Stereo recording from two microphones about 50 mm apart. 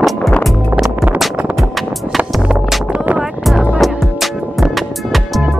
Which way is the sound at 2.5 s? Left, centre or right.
Centre.